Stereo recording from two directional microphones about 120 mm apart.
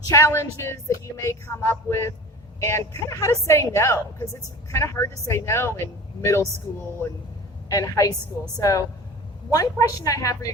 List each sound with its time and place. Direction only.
0.1 s music: 25° left (ahead or behind)
7.7 s music: 30° left (ahead or behind)